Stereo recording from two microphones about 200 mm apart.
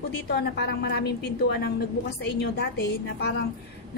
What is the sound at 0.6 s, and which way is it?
Speech, 55° left (ahead or behind).